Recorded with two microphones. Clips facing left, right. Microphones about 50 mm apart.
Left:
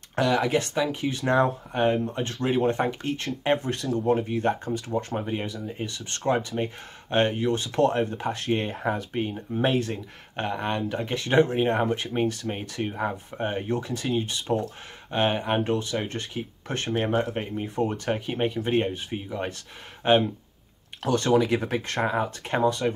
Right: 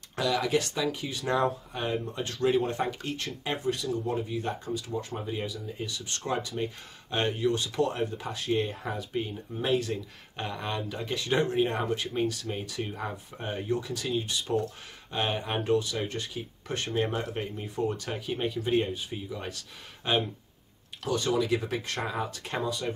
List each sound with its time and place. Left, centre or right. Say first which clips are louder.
0.1 s speech: left 4 dB; left
4.2 s speech: left 7 dB; left
21.0 s speech: left 6 dB; left
22.6 s speech: left 8 dB; left